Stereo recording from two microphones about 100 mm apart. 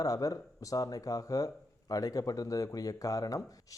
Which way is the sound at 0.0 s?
35° left (ahead or behind).